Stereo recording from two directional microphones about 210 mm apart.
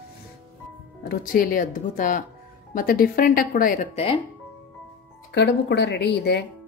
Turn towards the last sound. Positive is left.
turn(degrees=55)  # may be behind; listen again after turning